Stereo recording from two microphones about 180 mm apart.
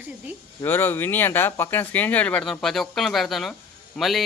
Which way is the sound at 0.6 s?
10° left (ahead or behind).